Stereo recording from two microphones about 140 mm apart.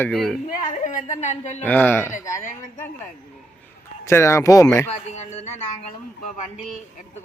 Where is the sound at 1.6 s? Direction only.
10° left (ahead or behind).